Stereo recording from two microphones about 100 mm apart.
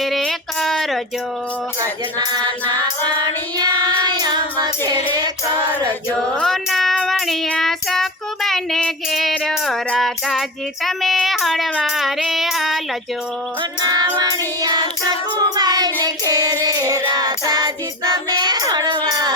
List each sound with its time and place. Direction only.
0.0 s music: centre (ahead or behind)
1.8 s music: 40° right (ahead or behind)
3.6 s child singing: 45° right (ahead or behind)
6.4 s music: centre (ahead or behind)
7.1 s child singing: centre (ahead or behind)
9.3 s music: 5° left (ahead or behind)
10.8 s child singing: centre (ahead or behind)
11.9 s female singing: centre (ahead or behind)
13.6 s music: 45° right (ahead or behind)
15.4 s child singing: 40° right (ahead or behind)